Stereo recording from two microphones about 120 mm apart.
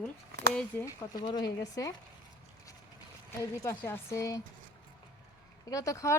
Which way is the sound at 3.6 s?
20° left (ahead or behind).